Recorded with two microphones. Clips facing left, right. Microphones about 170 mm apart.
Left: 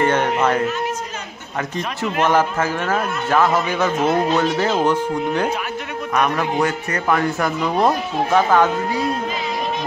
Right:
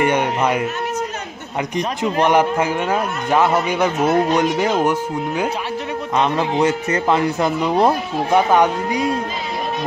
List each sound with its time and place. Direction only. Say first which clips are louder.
0.0 s a man's voice: even; 15° right (ahead or behind)
1.8 s a man's voice: right 3 dB; 15° right (ahead or behind)
6.1 s a man's voice: right 1 dB; 20° right (ahead or behind)